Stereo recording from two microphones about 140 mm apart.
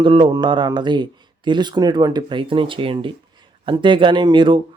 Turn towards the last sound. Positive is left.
turn(degrees=-35)  # may be behind; listen again after turning